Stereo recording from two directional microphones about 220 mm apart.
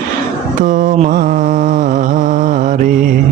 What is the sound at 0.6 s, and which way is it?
Mantra, 35° right (ahead or behind).